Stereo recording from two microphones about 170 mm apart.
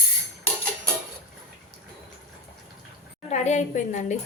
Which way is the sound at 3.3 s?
45° left (ahead or behind).